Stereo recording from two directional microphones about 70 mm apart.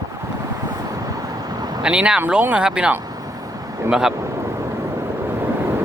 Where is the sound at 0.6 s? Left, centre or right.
Right.